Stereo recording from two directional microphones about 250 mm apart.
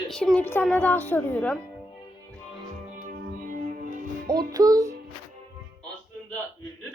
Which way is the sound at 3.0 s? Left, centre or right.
Right.